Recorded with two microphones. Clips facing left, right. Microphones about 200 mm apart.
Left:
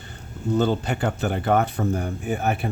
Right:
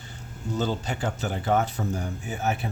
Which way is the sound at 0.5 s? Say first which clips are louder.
Left 6 dB; 60° left (ahead or behind).